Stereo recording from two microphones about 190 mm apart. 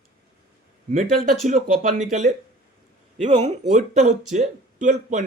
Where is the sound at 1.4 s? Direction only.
45° right (ahead or behind).